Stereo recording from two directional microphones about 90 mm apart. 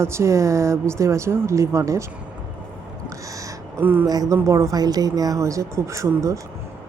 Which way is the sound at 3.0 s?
35° right (ahead or behind).